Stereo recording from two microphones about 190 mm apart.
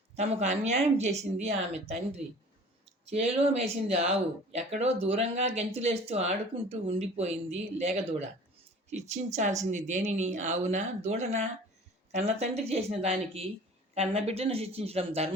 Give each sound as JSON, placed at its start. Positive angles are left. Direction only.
{"t": 0.2, "sound": "speech", "side_deg": -35}
{"t": 2.8, "sound": "speech", "side_deg": -35}